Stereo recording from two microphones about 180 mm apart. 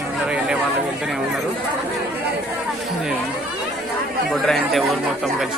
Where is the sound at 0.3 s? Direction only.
5° right (ahead or behind).